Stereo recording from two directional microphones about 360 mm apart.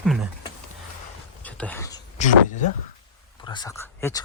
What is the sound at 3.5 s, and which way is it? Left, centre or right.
Speech, centre.